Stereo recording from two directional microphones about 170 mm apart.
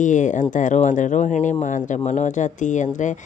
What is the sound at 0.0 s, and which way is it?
Speech, 50° left (ahead or behind).